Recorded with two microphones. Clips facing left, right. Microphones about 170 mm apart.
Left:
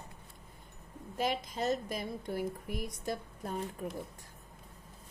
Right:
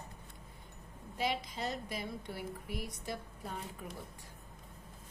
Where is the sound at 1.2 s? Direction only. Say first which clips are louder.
Left 3 dB; 45° left (ahead or behind).